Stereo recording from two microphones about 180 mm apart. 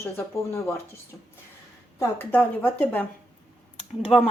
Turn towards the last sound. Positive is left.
turn(degrees=35)  # may be behind; listen again after turning